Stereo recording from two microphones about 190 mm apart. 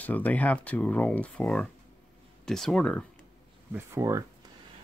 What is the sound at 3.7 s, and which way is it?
Speech, 15° right (ahead or behind).